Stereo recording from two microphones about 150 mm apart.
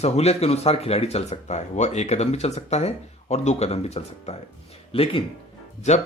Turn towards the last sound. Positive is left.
turn(degrees=50)  # may be behind; listen again after turning